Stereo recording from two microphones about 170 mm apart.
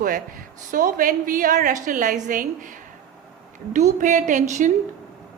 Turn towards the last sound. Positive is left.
turn(degrees=-45)  # may be behind; listen again after turning